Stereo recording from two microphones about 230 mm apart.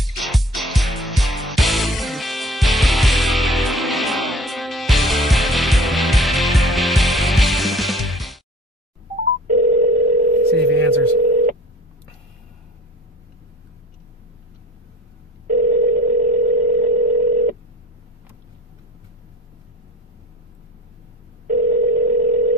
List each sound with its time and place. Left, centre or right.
0.0 s music: centre
9.5 s telephone: right
15.4 s telephone: right
21.5 s telephone: right